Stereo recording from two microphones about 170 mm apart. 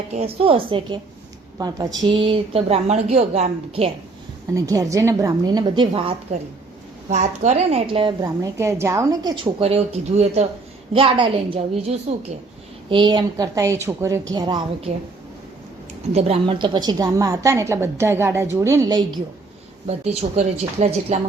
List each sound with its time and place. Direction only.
0.1 s a woman's voice: 35° right (ahead or behind)
4.5 s a woman's voice: 20° right (ahead or behind)
7.1 s a woman's voice: 45° right (ahead or behind); by 14.8 s 25° right (ahead or behind)
16.1 s a woman's voice: 35° right (ahead or behind)
19.9 s a woman's voice: 40° right (ahead or behind)